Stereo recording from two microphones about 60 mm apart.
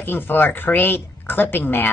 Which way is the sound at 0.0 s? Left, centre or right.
Left.